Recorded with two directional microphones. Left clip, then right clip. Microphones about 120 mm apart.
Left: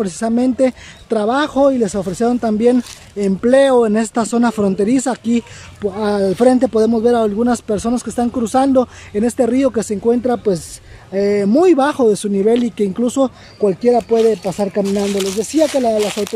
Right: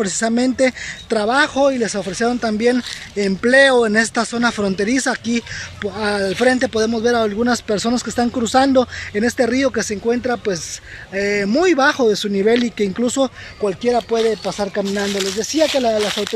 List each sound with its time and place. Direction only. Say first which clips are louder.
0.0 s speech: left 1 dB; 20° left (ahead or behind)
15.6 s speech: left 1 dB; centre (ahead or behind)
15.9 s speech: left 2 dB; 30° left (ahead or behind)